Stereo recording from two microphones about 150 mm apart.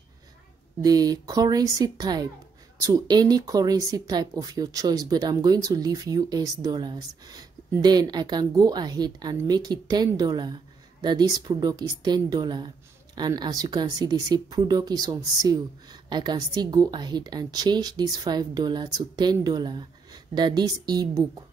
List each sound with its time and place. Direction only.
0.8 s speech: 25° right (ahead or behind)